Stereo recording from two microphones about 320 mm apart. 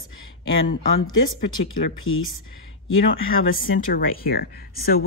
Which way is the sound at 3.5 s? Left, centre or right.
Left.